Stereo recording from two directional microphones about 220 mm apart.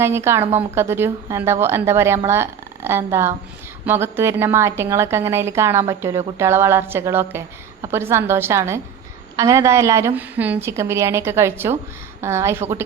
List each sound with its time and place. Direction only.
0.0 s a woman's voice: 10° right (ahead or behind)